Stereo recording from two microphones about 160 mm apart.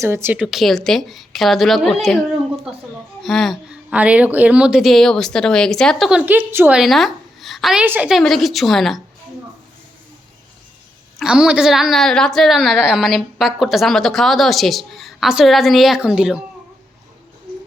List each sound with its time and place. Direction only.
0.0 s a woman's voice: 15° right (ahead or behind)
0.4 s a woman's voice: centre (ahead or behind)
6.1 s a woman's voice: 10° right (ahead or behind)
6.7 s a woman's voice: centre (ahead or behind)
11.2 s a woman's voice: 5° right (ahead or behind)